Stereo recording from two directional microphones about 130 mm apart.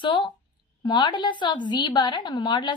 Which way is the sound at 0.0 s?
40° left (ahead or behind).